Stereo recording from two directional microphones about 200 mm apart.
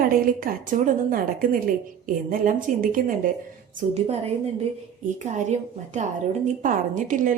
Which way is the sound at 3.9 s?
30° right (ahead or behind).